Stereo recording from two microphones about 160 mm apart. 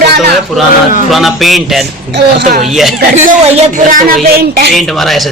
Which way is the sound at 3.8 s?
65° right (ahead or behind).